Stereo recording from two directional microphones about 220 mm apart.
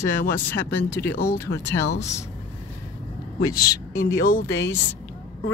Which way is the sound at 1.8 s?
50° left (ahead or behind).